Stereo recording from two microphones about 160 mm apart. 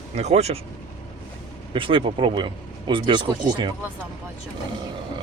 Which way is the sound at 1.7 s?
35° right (ahead or behind).